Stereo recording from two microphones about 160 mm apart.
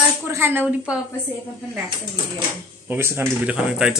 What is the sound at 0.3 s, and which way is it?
Speech, 15° right (ahead or behind).